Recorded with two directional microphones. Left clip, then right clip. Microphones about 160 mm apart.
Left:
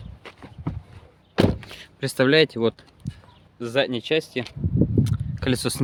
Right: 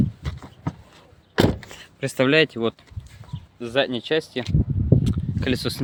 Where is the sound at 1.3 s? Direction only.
40° right (ahead or behind).